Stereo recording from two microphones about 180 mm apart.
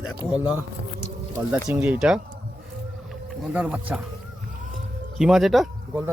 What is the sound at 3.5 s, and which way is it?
Speech, 10° right (ahead or behind).